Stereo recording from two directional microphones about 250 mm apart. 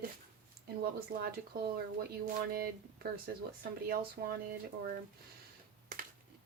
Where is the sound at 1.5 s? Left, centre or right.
Right.